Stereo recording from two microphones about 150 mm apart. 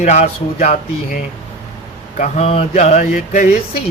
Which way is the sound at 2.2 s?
40° left (ahead or behind).